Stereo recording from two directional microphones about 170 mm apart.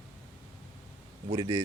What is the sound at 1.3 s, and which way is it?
Speech, 25° right (ahead or behind).